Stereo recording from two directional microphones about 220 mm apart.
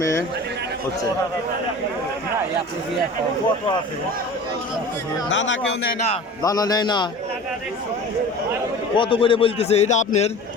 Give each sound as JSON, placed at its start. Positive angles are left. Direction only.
{"t": 0.0, "sound": "speech", "side_deg": 15}
{"t": 5.3, "sound": "a man's voice", "side_deg": 55}
{"t": 6.4, "sound": "speech", "side_deg": 15}
{"t": 9.0, "sound": "a man's voice", "side_deg": 25}